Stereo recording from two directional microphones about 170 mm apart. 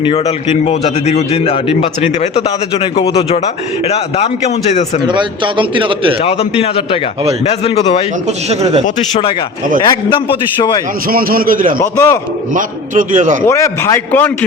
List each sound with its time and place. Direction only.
0.0 s a man's voice: 35° left (ahead or behind)
5.0 s a man's voice: 30° right (ahead or behind)
6.2 s a man's voice: 35° left (ahead or behind)
8.4 s speech: 40° right (ahead or behind)
9.8 s a man's voice: 25° left (ahead or behind)
11.1 s a man's voice: 60° right (ahead or behind)
11.8 s a man's voice: 15° left (ahead or behind)
12.5 s a man's voice: 50° right (ahead or behind)
13.4 s a man's voice: 15° left (ahead or behind)